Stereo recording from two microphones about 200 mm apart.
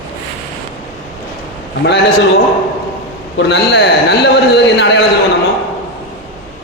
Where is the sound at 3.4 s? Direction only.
60° left (ahead or behind).